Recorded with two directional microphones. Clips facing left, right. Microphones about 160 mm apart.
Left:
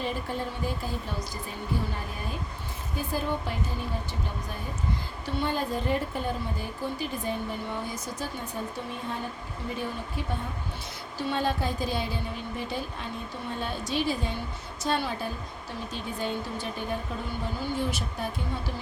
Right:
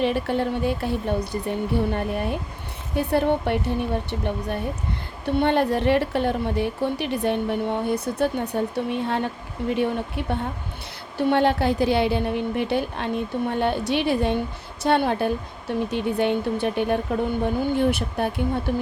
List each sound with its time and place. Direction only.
0.0 s a woman's voice: 70° right (ahead or behind)
5.2 s a woman's voice: 65° right (ahead or behind)